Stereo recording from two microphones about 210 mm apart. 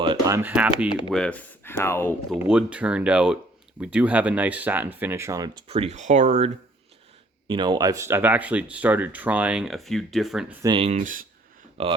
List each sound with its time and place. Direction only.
0.0 s speech: 20° right (ahead or behind)
1.1 s speech: 5° left (ahead or behind)
2.3 s speech: 5° right (ahead or behind); by 6.5 s 35° right (ahead or behind)
7.4 s speech: 20° right (ahead or behind); by 10.4 s centre (ahead or behind)
10.6 s speech: 20° right (ahead or behind)
10.8 s speech: 40° right (ahead or behind)
11.8 s speech: 30° right (ahead or behind)